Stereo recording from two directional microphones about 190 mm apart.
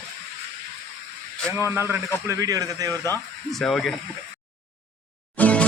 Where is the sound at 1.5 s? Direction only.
15° right (ahead or behind).